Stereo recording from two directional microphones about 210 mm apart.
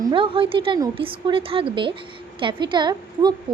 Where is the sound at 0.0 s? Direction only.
25° right (ahead or behind).